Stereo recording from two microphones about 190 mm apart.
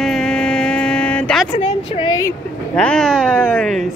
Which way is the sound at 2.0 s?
15° left (ahead or behind).